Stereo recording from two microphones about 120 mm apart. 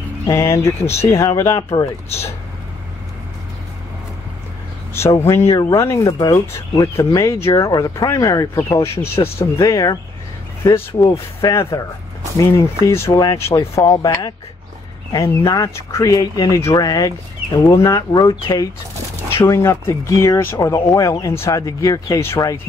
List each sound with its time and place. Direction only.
0.3 s speech: 25° left (ahead or behind)
4.9 s speech: 20° left (ahead or behind)
19.3 s speech: 20° left (ahead or behind)